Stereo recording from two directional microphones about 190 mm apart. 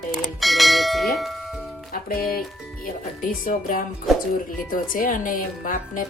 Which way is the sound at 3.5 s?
45° left (ahead or behind).